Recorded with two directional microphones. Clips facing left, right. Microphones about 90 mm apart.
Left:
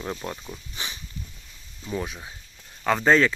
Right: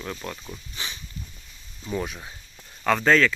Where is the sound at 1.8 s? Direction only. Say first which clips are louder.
Right 1 dB; centre (ahead or behind).